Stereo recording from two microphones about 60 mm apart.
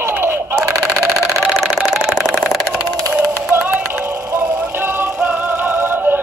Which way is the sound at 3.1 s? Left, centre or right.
Right.